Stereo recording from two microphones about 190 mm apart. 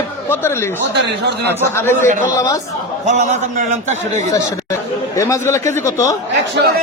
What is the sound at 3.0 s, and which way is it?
Speech, 40° right (ahead or behind).